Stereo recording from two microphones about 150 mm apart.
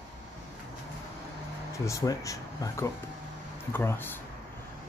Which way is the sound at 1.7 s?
20° left (ahead or behind).